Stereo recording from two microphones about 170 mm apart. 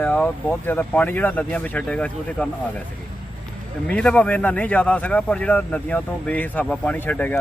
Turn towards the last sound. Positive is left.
turn(degrees=10)  # may be behind; listen again after turning